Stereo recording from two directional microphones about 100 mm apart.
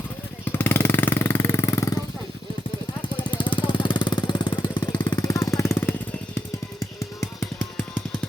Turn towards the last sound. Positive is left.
turn(degrees=20)  # may be behind; listen again after turning